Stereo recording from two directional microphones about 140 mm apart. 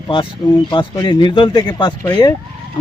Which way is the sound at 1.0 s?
35° left (ahead or behind).